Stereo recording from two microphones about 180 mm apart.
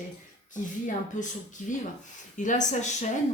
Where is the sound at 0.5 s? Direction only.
45° left (ahead or behind).